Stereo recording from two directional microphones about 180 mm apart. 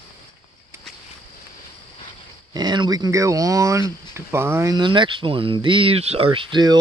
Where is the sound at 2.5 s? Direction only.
25° right (ahead or behind).